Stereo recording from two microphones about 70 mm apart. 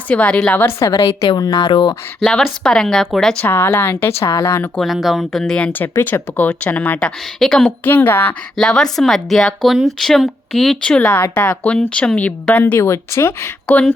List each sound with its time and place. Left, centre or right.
0.1 s speech: centre
0.8 s a woman's voice: left
1.4 s speech: left
2.3 s speech: centre
3.4 s speech: left
4.8 s speech: centre
6.0 s speech: left
7.3 s speech: centre
7.9 s speech: left
8.5 s speech: centre
10.8 s speech: centre
12.8 s speech: left